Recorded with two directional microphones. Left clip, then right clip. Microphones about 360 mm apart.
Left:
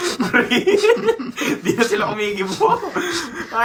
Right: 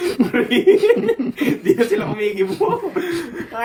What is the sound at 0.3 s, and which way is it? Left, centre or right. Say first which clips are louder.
Chuckle: right 1 dB; centre.